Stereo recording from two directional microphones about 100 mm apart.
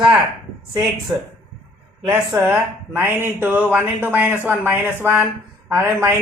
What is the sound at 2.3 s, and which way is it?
Speech, 30° right (ahead or behind).